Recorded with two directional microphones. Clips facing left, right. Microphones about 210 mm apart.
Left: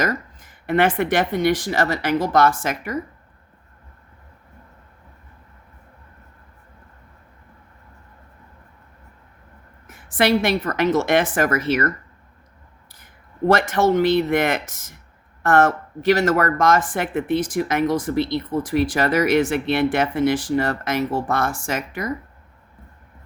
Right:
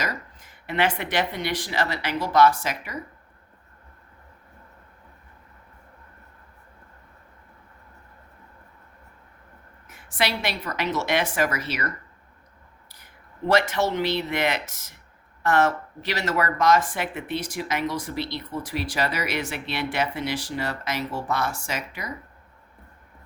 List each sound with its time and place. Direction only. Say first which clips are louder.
0.0 s speech: left 8 dB; 50° left (ahead or behind)
9.8 s speech: left 7 dB; 50° left (ahead or behind)
13.5 s speech: left 5 dB; 50° left (ahead or behind)